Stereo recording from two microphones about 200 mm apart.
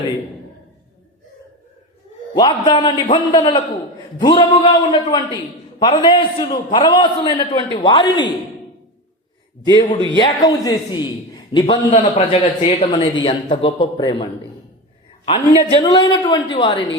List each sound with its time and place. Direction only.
2.3 s a man's voice: 25° left (ahead or behind)
10.2 s a man's voice: 20° left (ahead or behind)
15.3 s a man's voice: 25° left (ahead or behind)